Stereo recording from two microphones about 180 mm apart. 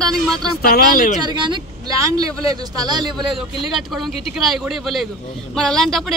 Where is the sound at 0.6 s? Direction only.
55° left (ahead or behind).